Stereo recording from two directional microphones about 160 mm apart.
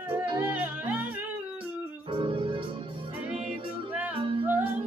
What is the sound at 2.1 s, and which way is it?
Organ, 35° right (ahead or behind).